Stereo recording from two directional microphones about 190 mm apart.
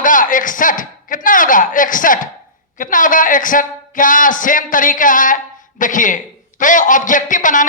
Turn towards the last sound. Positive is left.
turn(degrees=45)  # may be behind; listen again after turning